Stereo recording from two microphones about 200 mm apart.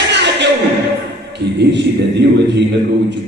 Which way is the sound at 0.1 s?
60° right (ahead or behind).